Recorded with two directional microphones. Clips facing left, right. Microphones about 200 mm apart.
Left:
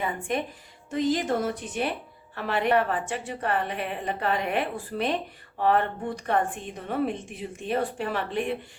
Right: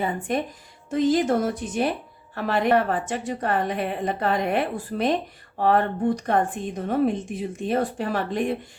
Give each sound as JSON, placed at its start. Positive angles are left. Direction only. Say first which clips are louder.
{"t": 0.0, "sound": "a woman's voice", "louder": "right 3 dB", "side_deg": -35}
{"t": 0.9, "sound": "a woman's voice", "louder": "right 5 dB", "side_deg": -45}